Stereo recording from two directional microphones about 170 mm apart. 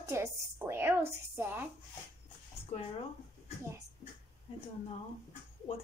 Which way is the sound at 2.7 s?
40° left (ahead or behind).